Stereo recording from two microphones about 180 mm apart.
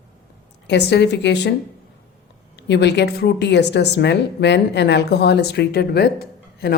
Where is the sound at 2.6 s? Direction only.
70° left (ahead or behind).